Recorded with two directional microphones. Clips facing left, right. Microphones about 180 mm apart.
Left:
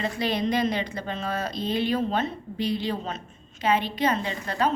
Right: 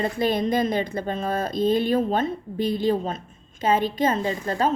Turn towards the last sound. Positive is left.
turn(degrees=-45)  # may be behind; listen again after turning